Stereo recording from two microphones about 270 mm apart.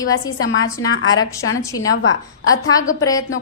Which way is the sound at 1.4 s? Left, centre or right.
Left.